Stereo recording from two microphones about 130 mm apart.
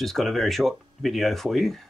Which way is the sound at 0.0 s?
Centre (ahead or behind).